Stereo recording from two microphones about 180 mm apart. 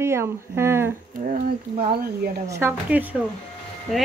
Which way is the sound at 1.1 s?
50° right (ahead or behind).